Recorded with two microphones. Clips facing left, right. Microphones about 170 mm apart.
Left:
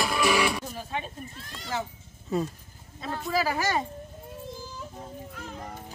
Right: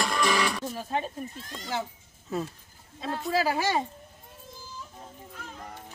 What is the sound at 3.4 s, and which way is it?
Speech, 20° right (ahead or behind).